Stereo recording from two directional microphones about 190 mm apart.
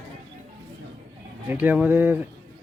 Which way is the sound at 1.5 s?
5° right (ahead or behind).